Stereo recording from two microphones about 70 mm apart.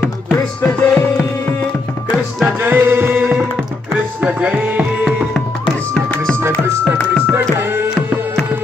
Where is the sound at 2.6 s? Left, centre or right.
Right.